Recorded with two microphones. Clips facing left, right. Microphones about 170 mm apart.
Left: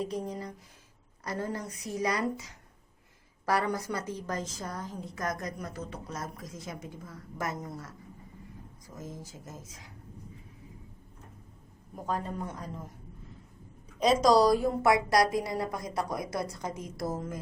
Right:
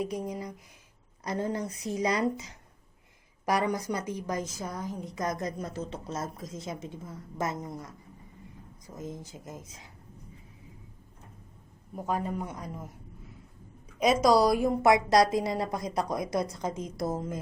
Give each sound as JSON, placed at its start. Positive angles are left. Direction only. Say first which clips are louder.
{"t": 0.0, "sound": "a man's voice", "louder": "right 1 dB", "side_deg": -10}
{"t": 9.0, "sound": "a woman's voice", "louder": "right 3 dB", "side_deg": -20}
{"t": 12.0, "sound": "a man's voice", "louder": "right 2 dB", "side_deg": -10}
{"t": 14.2, "sound": "a woman's voice", "louder": "even", "side_deg": -10}